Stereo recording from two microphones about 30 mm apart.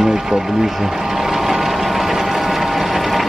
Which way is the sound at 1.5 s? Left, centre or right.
Centre.